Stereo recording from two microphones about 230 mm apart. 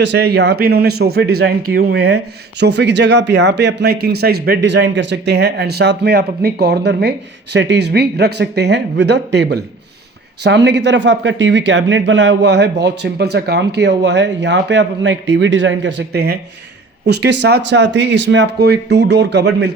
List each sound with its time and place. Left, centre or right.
0.0 s speech: right